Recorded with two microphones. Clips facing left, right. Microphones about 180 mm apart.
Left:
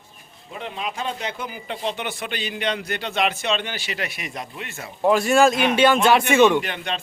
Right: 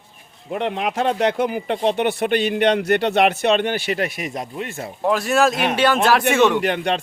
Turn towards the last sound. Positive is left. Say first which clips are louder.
# right 9 dB
turn(degrees=-65)  # may be behind; listen again after turning